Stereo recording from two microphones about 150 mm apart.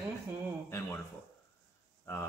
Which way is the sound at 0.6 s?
15° left (ahead or behind).